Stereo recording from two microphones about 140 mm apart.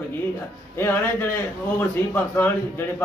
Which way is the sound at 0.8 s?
15° left (ahead or behind).